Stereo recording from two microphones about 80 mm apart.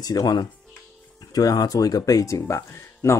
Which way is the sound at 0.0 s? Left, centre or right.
Left.